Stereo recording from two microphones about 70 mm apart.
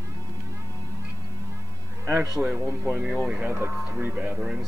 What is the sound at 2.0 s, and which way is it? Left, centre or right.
Speech, right.